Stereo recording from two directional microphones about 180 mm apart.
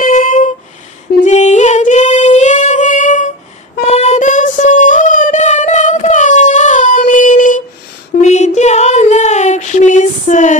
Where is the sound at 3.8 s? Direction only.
35° left (ahead or behind).